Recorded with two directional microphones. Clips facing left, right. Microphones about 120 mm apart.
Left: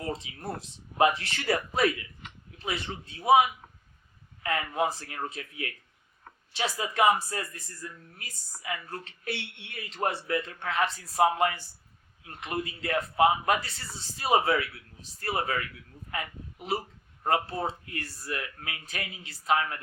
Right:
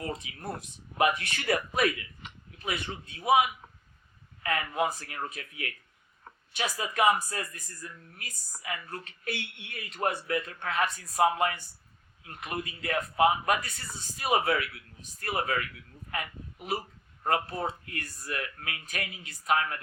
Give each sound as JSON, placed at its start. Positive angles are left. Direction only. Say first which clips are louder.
{"t": 0.1, "sound": "speech", "louder": "left 2 dB", "side_deg": 25}
{"t": 4.4, "sound": "speech", "louder": "left 1 dB", "side_deg": 25}